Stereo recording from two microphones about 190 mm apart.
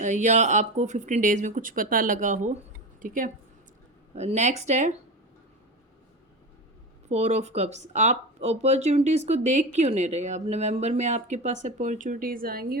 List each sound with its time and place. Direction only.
0.0 s a woman's voice: 40° right (ahead or behind)
4.1 s a woman's voice: 35° right (ahead or behind)
7.1 s a woman's voice: 35° right (ahead or behind)